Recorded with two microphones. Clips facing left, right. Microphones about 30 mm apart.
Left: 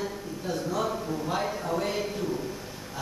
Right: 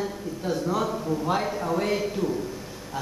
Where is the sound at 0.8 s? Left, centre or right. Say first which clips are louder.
Right 3 dB; centre.